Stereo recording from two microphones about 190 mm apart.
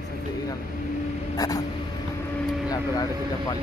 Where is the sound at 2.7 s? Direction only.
20° left (ahead or behind).